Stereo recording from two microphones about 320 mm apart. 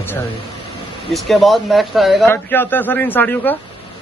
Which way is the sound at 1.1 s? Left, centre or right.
Centre.